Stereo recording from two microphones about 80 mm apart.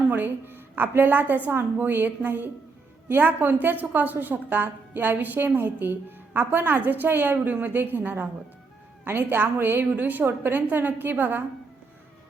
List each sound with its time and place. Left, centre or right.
0.1 s a woman's voice: right